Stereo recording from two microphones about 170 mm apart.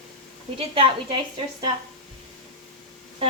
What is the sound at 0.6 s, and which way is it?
Speech, 30° right (ahead or behind).